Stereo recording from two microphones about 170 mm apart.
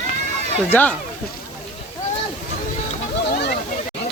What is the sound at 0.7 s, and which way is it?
Speech, 10° left (ahead or behind).